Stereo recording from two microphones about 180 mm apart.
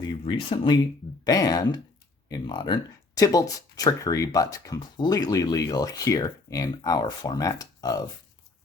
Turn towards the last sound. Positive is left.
turn(degrees=20)  # may be behind; listen again after turning